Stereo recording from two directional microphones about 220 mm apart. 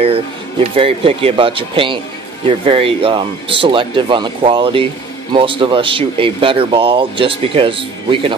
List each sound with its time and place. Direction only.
0.7 s speech: 25° right (ahead or behind)